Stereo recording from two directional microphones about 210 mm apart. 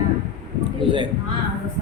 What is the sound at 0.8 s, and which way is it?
Speech, 25° right (ahead or behind).